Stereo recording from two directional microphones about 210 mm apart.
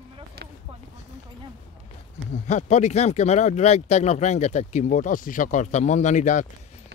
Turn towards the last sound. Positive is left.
turn(degrees=35)  # may be behind; listen again after turning